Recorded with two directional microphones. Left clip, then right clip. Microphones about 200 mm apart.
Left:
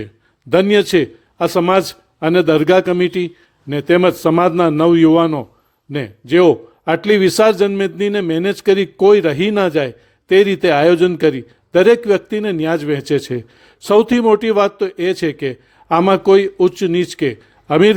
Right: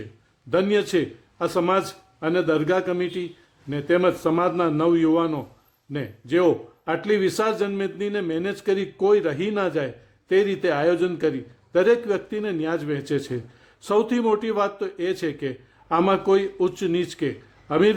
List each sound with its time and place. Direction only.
0.5 s a man's voice: 40° left (ahead or behind)